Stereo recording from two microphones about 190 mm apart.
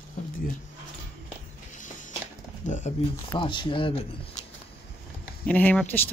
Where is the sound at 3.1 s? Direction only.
25° left (ahead or behind).